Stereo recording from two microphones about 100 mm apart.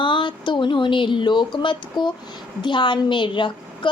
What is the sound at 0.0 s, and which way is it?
A woman's voice, 55° left (ahead or behind).